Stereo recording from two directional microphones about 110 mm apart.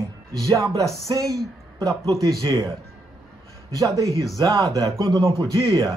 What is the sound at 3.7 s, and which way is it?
A man's voice, 30° right (ahead or behind).